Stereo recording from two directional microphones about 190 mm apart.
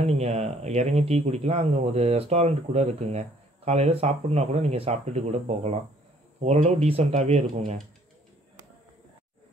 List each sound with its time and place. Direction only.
0.0 s speech: 35° right (ahead or behind)